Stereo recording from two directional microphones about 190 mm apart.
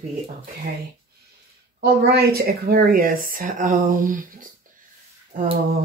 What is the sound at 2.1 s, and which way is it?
Speech, 55° right (ahead or behind).